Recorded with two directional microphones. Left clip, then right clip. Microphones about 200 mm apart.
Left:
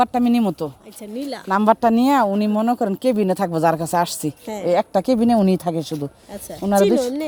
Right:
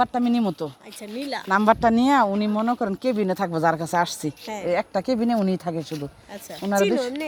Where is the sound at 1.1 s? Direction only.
45° left (ahead or behind).